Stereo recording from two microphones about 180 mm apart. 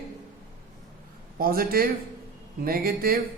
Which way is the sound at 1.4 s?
55° right (ahead or behind).